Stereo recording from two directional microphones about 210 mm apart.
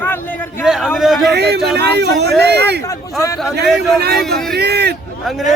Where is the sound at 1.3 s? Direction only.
50° right (ahead or behind).